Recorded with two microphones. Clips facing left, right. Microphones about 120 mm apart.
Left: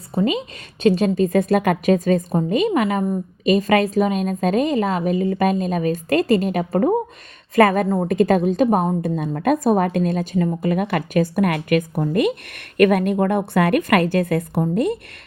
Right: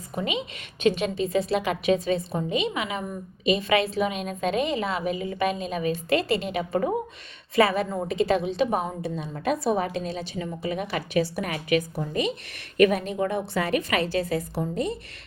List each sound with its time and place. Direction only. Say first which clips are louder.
0.1 s a woman's voice: left 8 dB; 35° left (ahead or behind); by 14.9 s 55° left (ahead or behind)